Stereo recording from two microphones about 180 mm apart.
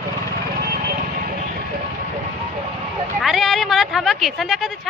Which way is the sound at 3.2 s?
Centre (ahead or behind).